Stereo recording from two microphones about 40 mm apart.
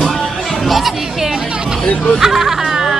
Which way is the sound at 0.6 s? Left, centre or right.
Centre.